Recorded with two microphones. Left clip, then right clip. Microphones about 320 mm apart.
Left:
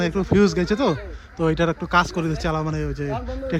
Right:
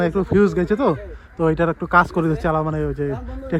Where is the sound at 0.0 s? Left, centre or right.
Centre.